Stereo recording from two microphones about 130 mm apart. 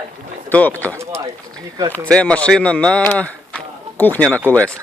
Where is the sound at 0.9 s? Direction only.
20° right (ahead or behind).